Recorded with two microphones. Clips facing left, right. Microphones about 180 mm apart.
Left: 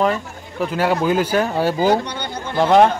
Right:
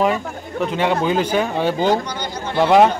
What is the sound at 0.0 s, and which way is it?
Speech, centre (ahead or behind).